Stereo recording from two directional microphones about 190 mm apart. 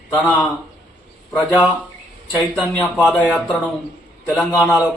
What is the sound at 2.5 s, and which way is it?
Speech, 5° left (ahead or behind).